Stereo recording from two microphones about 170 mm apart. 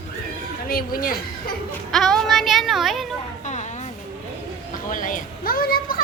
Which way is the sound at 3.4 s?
45° left (ahead or behind).